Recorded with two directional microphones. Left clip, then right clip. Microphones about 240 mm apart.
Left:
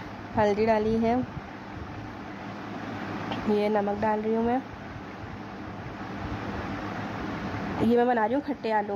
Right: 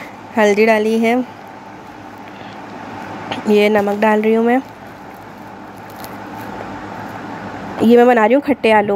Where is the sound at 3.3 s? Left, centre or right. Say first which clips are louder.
Right 13 dB; centre.